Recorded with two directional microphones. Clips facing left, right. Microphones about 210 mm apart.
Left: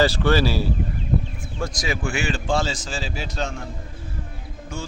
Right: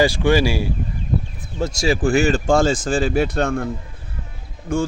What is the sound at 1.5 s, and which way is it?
Speech, 25° right (ahead or behind).